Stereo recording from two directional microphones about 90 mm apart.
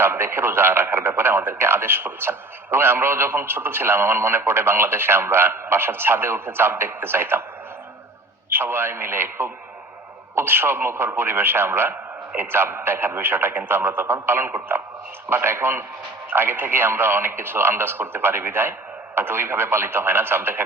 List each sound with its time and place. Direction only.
0.0 s speech: 25° right (ahead or behind)
8.4 s speech: 25° right (ahead or behind)